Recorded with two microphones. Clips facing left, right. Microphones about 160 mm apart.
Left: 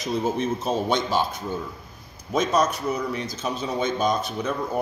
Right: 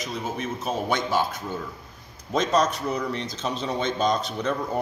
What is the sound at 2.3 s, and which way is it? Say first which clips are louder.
Speech: even; 5° left (ahead or behind).